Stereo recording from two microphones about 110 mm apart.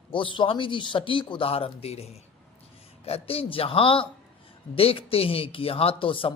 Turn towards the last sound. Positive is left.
turn(degrees=55)  # may be behind; listen again after turning